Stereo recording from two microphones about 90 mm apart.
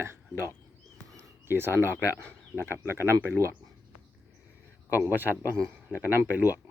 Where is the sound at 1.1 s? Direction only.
25° right (ahead or behind).